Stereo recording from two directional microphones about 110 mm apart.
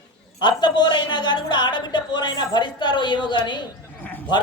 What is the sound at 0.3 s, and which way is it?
A man's voice, 45° left (ahead or behind).